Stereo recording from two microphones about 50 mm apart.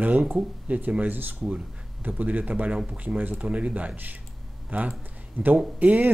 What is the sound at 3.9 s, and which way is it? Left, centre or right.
Speech, right.